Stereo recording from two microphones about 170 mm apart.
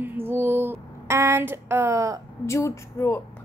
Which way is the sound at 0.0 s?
10° right (ahead or behind).